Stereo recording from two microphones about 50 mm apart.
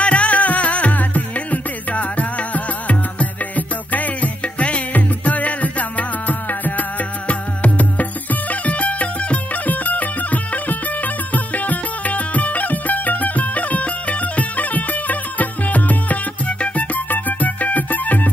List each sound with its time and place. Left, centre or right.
0.0 s music: left